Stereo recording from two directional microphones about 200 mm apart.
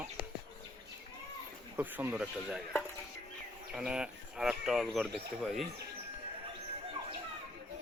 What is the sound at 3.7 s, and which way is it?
Speech, 5° right (ahead or behind).